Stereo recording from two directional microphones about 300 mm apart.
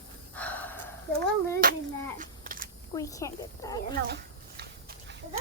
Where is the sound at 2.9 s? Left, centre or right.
Centre.